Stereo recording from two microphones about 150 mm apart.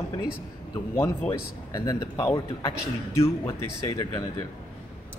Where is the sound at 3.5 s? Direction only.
25° left (ahead or behind).